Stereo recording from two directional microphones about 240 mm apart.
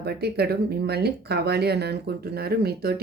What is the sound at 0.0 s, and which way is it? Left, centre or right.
Speech, right.